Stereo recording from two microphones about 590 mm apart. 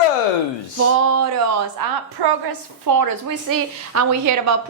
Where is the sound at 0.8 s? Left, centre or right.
Right.